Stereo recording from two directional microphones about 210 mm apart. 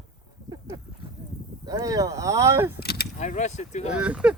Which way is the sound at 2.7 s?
50° left (ahead or behind).